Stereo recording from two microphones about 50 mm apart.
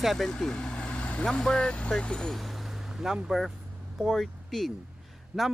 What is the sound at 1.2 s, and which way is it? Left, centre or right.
Speech, centre.